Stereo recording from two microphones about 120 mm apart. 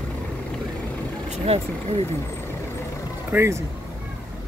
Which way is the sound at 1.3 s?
60° right (ahead or behind).